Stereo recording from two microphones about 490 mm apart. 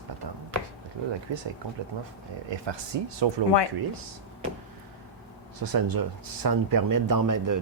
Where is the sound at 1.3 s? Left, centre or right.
Right.